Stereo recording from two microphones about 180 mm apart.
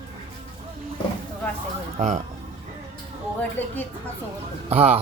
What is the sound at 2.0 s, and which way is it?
Speech, 40° right (ahead or behind).